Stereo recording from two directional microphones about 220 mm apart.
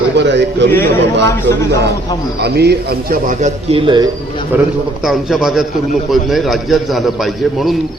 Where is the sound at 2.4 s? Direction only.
45° right (ahead or behind); by 4.1 s 20° right (ahead or behind).